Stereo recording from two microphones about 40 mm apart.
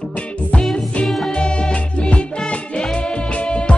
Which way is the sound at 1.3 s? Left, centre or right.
Left.